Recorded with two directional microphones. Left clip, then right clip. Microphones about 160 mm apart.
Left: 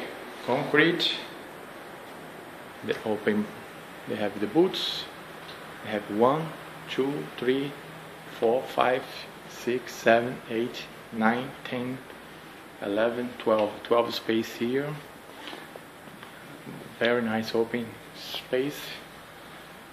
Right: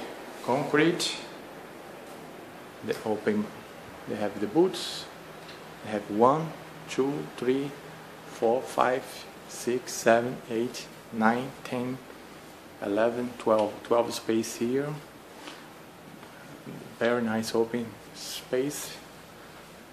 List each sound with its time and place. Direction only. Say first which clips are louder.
0.5 s speech: left 2 dB; 15° right (ahead or behind)
2.9 s speech: left 1 dB; centre (ahead or behind)
5.9 s speech: right 1 dB; 10° right (ahead or behind)
13.8 s speech: left 1 dB; 10° right (ahead or behind)
17.0 s speech: left 1 dB; 5° right (ahead or behind)